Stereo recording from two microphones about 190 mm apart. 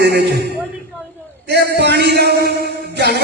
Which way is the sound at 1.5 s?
60° right (ahead or behind).